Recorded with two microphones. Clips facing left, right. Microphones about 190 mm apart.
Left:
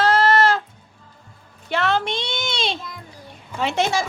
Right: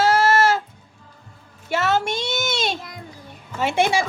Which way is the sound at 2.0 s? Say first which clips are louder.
Right 2 dB; 45° right (ahead or behind).